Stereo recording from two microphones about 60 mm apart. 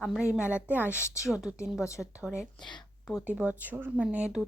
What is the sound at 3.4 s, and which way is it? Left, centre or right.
Speech, right.